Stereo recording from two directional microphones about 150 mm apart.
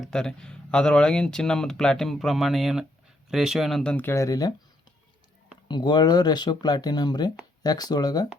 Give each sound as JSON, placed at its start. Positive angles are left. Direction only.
{"t": 0.0, "sound": "speech", "side_deg": 5}
{"t": 5.6, "sound": "speech", "side_deg": 30}